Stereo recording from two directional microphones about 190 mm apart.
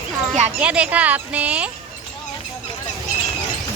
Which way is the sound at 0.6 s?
5° right (ahead or behind).